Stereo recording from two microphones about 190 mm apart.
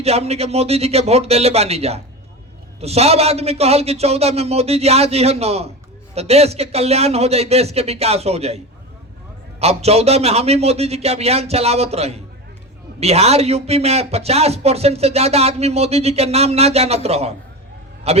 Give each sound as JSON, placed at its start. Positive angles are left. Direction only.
{"t": 0.0, "sound": "speech", "side_deg": -35}